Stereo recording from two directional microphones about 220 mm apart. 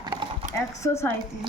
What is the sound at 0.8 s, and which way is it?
Speech, 10° left (ahead or behind).